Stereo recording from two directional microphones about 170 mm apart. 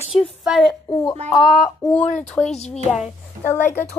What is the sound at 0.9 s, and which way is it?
Speech, 20° left (ahead or behind).